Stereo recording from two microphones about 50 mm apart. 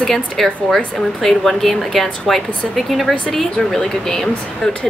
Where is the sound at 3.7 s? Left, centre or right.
Centre.